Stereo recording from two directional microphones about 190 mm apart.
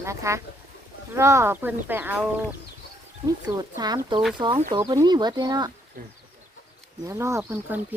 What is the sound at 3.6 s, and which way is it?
Speech, 20° right (ahead or behind).